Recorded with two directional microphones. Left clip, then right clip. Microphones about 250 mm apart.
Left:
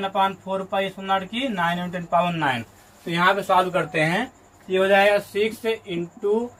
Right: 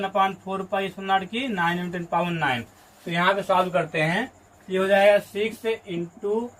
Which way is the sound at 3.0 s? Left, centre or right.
Centre.